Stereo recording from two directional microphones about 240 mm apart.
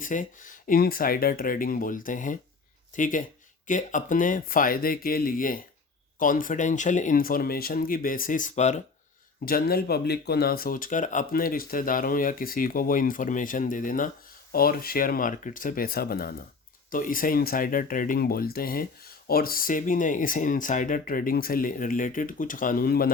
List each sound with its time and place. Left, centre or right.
0.0 s speech: left